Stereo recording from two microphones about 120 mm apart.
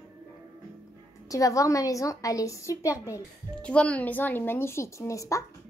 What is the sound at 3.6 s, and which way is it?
A woman's voice, 10° left (ahead or behind).